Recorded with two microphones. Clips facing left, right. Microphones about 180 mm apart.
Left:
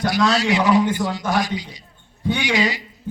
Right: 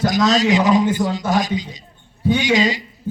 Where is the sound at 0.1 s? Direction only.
20° right (ahead or behind).